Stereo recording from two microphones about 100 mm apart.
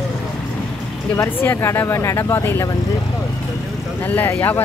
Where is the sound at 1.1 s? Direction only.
20° left (ahead or behind).